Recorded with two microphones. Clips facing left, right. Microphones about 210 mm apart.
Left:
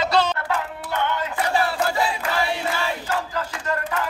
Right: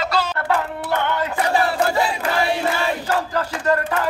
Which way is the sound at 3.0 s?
70° right (ahead or behind).